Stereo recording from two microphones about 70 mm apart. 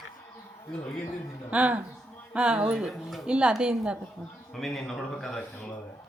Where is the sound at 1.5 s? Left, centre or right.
Centre.